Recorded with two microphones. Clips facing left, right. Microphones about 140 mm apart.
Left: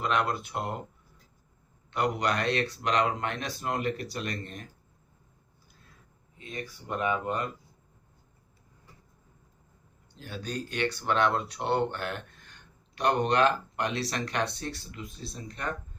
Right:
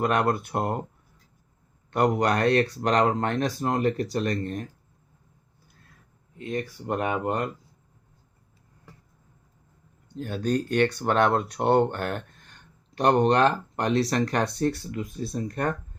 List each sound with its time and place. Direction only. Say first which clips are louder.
0.0 s speech: right 5 dB; 55° right (ahead or behind)
1.9 s speech: right 6 dB; 50° right (ahead or behind)
6.4 s speech: right 9 dB; 60° right (ahead or behind)
10.2 s speech: right 10 dB; 50° right (ahead or behind)